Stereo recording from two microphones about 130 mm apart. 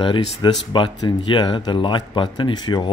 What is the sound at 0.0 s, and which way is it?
Speech, 40° left (ahead or behind).